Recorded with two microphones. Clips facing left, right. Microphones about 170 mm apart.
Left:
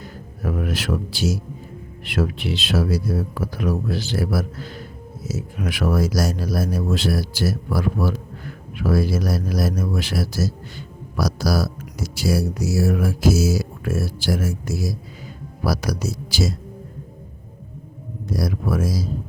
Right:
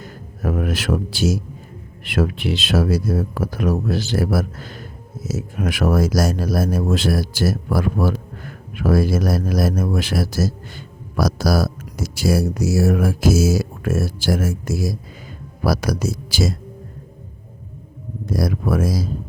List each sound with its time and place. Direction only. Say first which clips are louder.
0.0 s music: right 3 dB; 50° right (ahead or behind)
2.0 s speech: right 3 dB; 50° right (ahead or behind)
18.3 s speech: right 3 dB; 50° right (ahead or behind)